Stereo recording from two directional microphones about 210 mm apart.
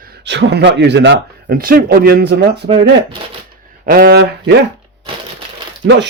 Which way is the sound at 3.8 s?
45° right (ahead or behind).